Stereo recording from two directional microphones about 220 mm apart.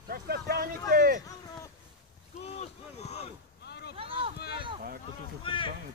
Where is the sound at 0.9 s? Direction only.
40° right (ahead or behind).